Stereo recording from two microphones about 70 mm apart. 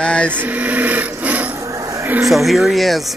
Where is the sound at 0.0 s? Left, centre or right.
Centre.